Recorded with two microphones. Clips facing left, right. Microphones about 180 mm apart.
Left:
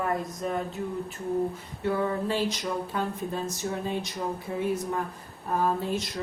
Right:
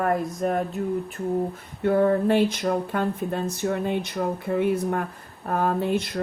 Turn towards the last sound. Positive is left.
turn(degrees=-60)  # may be behind; listen again after turning